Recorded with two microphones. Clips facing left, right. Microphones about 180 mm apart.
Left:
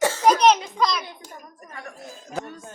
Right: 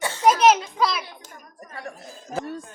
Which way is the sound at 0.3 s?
5° right (ahead or behind).